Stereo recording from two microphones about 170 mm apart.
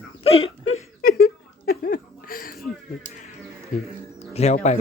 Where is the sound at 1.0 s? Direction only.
60° left (ahead or behind).